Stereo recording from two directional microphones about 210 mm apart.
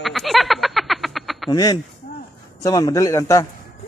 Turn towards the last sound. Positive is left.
turn(degrees=15)  # may be behind; listen again after turning